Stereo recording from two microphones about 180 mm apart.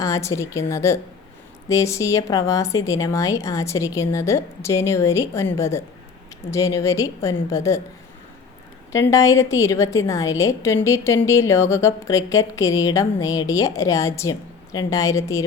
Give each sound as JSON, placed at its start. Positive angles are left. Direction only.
{"t": 0.0, "sound": "a woman's voice", "side_deg": 15}
{"t": 8.9, "sound": "a woman's voice", "side_deg": 15}